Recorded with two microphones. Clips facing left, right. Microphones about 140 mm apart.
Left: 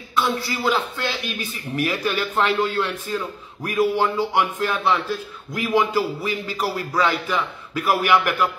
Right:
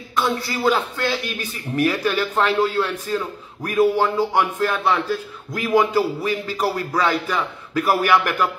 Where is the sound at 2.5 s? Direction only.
10° right (ahead or behind).